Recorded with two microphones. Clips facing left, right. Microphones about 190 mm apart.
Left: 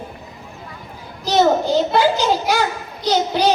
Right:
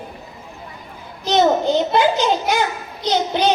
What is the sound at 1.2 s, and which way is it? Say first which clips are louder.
A child's voice: even; 20° right (ahead or behind).